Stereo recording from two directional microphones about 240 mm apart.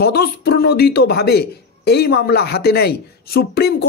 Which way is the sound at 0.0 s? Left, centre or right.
Left.